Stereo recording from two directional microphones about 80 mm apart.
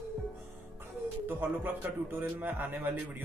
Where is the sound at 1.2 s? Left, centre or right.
Right.